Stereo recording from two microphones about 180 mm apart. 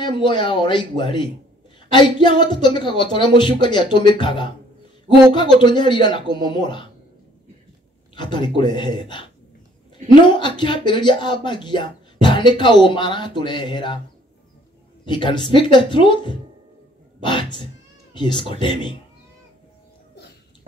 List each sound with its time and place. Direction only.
0.0 s speech: 25° left (ahead or behind)
5.6 s speech: 25° left (ahead or behind)
8.2 s speech: 25° left (ahead or behind)
15.0 s speech: 25° left (ahead or behind)